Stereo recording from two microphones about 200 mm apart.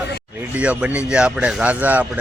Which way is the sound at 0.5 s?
5° right (ahead or behind).